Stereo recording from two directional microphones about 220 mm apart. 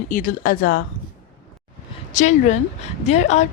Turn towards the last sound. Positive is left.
turn(degrees=30)  # may be behind; listen again after turning